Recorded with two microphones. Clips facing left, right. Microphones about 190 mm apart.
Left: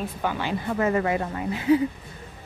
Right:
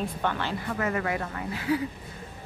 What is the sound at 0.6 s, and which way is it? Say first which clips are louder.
Speech: left 6 dB; 25° left (ahead or behind).